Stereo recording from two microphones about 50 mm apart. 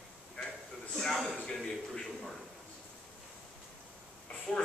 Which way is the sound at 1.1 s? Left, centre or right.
Centre.